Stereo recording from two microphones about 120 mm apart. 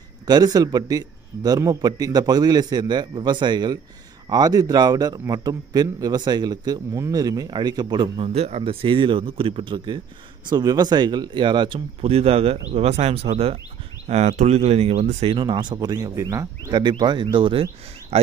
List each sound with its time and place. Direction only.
0.3 s a man's voice: 30° right (ahead or behind)
8.3 s a man's voice: 60° right (ahead or behind); by 9.9 s 45° right (ahead or behind)
10.5 s a man's voice: 35° right (ahead or behind)
12.0 s speech: 55° right (ahead or behind)
14.0 s speech: 70° right (ahead or behind)
15.3 s a man's voice: 40° right (ahead or behind)
16.7 s a man's voice: 40° right (ahead or behind)
18.1 s speech: 60° right (ahead or behind)